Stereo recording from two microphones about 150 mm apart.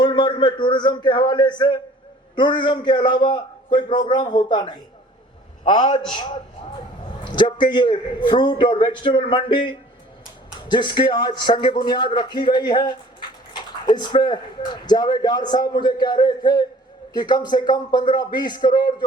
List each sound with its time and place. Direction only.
0.0 s a man's voice: 30° left (ahead or behind)
7.3 s a man's voice: 30° left (ahead or behind)